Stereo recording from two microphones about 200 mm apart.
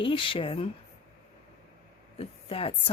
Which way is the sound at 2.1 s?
30° left (ahead or behind).